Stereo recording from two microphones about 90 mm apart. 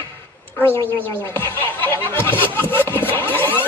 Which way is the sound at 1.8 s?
25° left (ahead or behind).